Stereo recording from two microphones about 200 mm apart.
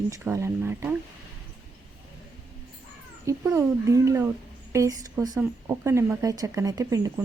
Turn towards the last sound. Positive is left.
turn(degrees=-15)  # may be behind; listen again after turning